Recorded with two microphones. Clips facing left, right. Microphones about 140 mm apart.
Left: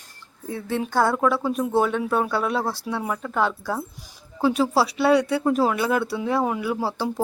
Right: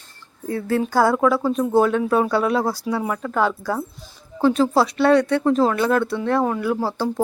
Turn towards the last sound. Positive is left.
turn(degrees=10)  # may be behind; listen again after turning